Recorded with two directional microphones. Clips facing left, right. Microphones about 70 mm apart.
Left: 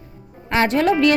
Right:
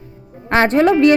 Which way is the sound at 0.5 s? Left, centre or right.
Right.